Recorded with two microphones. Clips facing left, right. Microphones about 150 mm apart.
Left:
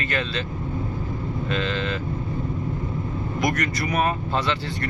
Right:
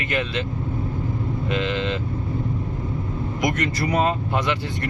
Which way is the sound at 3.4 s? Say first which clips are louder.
Right 1 dB; 20° right (ahead or behind).